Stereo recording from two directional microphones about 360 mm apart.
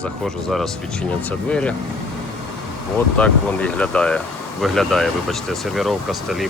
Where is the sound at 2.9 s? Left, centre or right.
Centre.